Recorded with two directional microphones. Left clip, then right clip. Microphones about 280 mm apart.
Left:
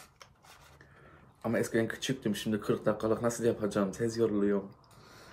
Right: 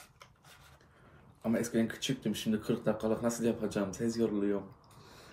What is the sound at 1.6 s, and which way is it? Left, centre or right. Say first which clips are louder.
Speech: left 3 dB; left.